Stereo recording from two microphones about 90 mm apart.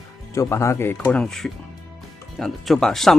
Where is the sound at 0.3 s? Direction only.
35° left (ahead or behind).